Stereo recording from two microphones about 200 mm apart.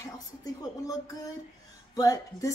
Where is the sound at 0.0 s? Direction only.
15° left (ahead or behind).